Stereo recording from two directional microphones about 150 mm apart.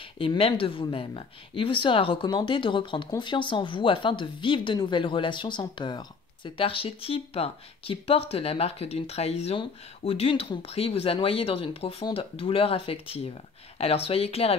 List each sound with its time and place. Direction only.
0.2 s speech: 35° left (ahead or behind)